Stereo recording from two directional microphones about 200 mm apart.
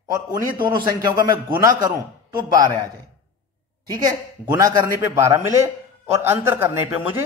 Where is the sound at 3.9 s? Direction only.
15° right (ahead or behind).